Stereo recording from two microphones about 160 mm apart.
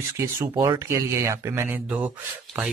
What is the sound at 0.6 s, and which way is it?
Speech, 20° right (ahead or behind).